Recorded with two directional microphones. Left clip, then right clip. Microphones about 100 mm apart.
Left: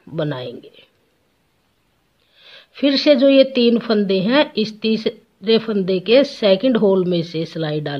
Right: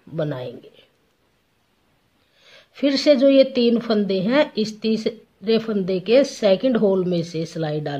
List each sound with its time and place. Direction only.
0.1 s speech: 35° left (ahead or behind)
2.3 s speech: 25° left (ahead or behind)